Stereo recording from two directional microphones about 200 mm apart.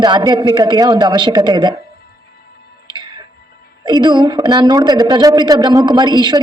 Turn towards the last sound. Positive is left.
turn(degrees=-20)  # may be behind; listen again after turning